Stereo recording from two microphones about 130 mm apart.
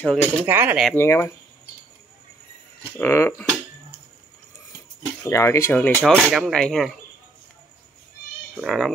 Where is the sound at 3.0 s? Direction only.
20° left (ahead or behind).